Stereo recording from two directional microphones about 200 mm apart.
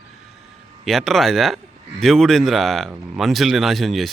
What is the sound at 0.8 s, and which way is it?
A man's voice, centre (ahead or behind).